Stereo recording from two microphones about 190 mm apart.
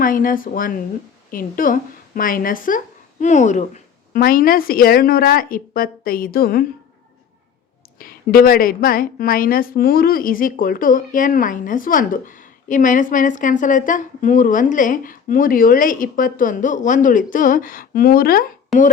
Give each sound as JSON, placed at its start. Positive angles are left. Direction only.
{"t": 0.0, "sound": "a woman's voice", "side_deg": 45}
{"t": 7.9, "sound": "a woman's voice", "side_deg": 50}
{"t": 18.7, "sound": "speech", "side_deg": 0}